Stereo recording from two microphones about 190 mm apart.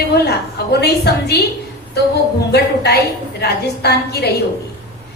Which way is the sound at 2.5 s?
55° left (ahead or behind).